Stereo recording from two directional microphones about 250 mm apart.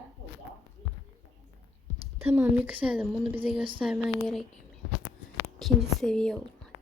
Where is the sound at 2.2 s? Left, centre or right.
Centre.